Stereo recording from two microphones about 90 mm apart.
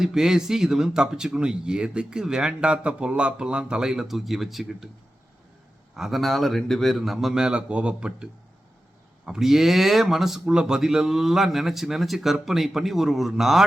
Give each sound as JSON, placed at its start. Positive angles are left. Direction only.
{"t": 0.0, "sound": "speech", "side_deg": -5}
{"t": 6.0, "sound": "a man's voice", "side_deg": 0}